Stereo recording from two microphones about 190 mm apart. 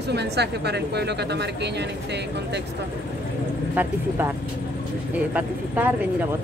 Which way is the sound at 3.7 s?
10° right (ahead or behind).